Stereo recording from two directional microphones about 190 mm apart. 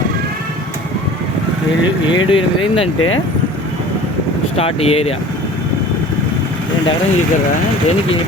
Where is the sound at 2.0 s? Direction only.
25° left (ahead or behind).